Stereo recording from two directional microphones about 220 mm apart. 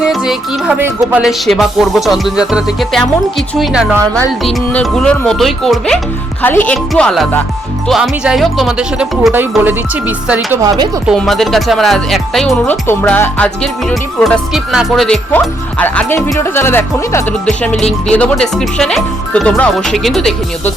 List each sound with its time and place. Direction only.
0.0 s speech: 5° right (ahead or behind)
11.1 s speech: centre (ahead or behind)